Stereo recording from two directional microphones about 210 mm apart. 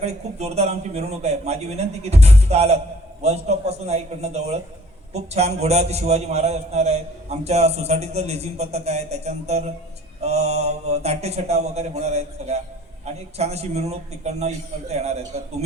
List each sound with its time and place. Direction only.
0.0 s a man's voice: 30° right (ahead or behind)